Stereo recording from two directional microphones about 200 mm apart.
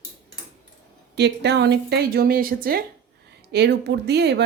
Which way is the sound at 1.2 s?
60° right (ahead or behind).